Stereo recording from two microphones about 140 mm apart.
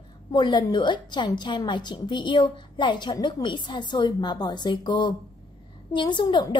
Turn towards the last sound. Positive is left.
turn(degrees=35)  # may be behind; listen again after turning